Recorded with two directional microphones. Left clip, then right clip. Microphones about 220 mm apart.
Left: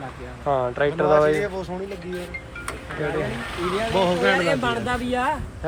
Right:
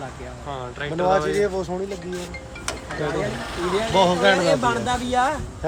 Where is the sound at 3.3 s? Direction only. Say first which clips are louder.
Right 1 dB; 45° right (ahead or behind).